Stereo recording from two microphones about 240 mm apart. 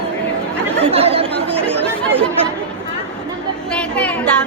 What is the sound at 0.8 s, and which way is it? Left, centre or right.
Chatter, right.